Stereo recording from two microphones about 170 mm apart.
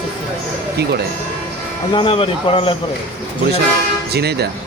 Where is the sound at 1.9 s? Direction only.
30° left (ahead or behind).